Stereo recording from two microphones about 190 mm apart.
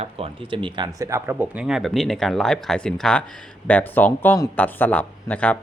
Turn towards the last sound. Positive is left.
turn(degrees=5)  # may be behind; listen again after turning